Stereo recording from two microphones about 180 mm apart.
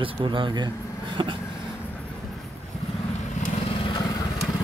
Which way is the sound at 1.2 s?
25° right (ahead or behind).